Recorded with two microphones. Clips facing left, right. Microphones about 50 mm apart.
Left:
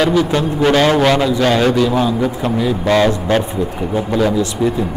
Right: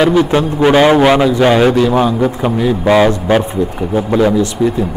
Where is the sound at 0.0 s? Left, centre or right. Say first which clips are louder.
Right 3 dB; centre.